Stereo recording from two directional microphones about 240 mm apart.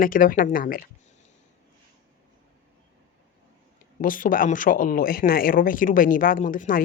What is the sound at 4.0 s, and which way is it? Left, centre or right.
Speech, left.